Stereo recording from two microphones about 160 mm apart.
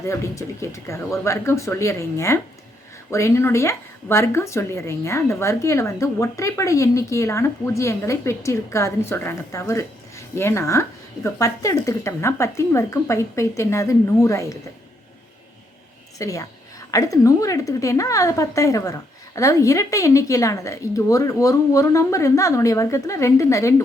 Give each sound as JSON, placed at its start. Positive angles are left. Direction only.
{"t": 0.0, "sound": "a woman's voice", "side_deg": 20}
{"t": 16.1, "sound": "a woman's voice", "side_deg": 20}